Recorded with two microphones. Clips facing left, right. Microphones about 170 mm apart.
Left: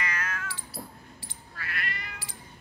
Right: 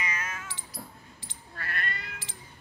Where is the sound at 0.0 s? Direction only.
15° right (ahead or behind).